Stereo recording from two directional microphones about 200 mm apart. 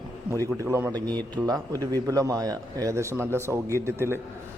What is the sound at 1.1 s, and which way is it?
Speech, 5° left (ahead or behind).